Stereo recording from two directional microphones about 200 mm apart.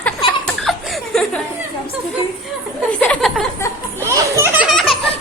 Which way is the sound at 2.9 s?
5° left (ahead or behind).